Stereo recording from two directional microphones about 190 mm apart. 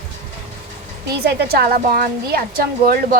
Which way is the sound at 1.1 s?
60° right (ahead or behind).